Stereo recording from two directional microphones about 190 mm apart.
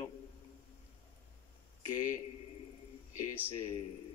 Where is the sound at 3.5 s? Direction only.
30° left (ahead or behind).